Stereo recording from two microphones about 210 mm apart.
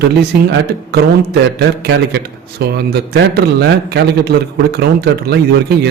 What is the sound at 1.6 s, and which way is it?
Speech, 50° right (ahead or behind).